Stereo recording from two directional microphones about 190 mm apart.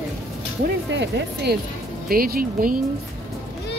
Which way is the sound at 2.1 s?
50° right (ahead or behind).